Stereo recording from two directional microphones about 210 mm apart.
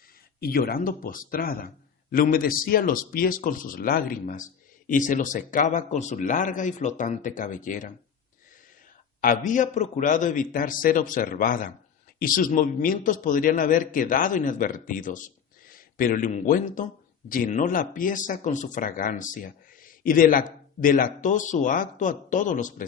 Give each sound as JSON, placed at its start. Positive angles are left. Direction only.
{"t": 0.3, "sound": "a man's voice", "side_deg": 45}
{"t": 9.2, "sound": "a man's voice", "side_deg": 40}